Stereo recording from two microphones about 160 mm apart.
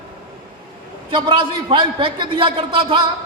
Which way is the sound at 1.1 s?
30° right (ahead or behind).